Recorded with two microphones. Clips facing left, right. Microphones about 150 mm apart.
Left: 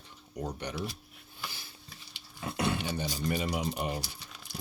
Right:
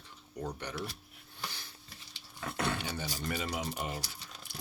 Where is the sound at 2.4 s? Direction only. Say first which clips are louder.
Left 3 dB; 15° left (ahead or behind).